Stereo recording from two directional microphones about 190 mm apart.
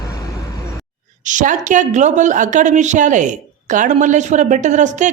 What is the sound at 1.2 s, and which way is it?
A woman's voice, 40° right (ahead or behind).